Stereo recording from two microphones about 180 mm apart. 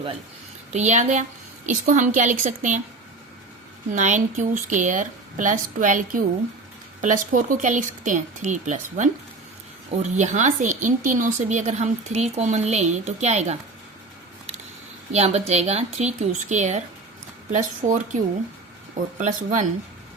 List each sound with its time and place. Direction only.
0.7 s a woman's voice: 40° right (ahead or behind)
3.9 s a woman's voice: 45° right (ahead or behind)
15.1 s a woman's voice: 35° right (ahead or behind)
19.2 s a woman's voice: 40° right (ahead or behind)